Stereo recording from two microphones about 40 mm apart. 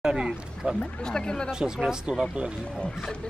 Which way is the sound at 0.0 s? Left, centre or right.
Right.